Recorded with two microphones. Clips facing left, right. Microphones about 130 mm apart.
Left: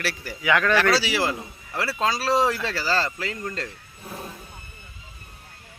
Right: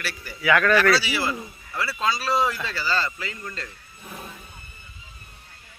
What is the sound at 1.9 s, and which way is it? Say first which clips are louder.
A man's voice: left 2 dB; 90° left.